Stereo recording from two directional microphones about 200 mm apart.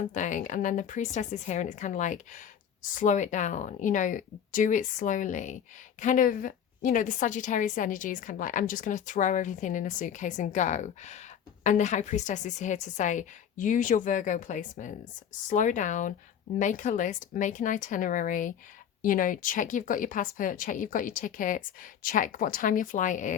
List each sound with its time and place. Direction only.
0.1 s a woman's voice: 40° left (ahead or behind)